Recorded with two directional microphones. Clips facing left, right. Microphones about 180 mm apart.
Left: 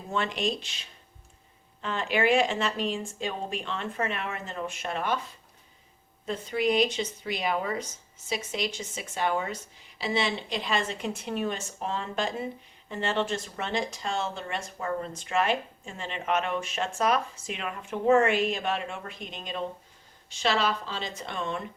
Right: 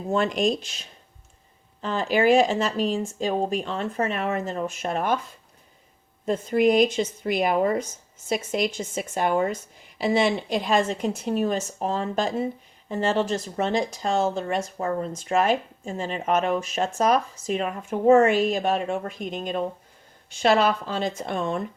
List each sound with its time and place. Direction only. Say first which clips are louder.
0.1 s speech: right 7 dB; 45° right (ahead or behind)
6.2 s speech: right 7 dB; 45° right (ahead or behind)